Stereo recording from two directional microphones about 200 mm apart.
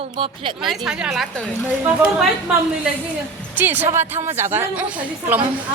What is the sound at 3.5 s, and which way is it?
A woman's voice, 10° right (ahead or behind).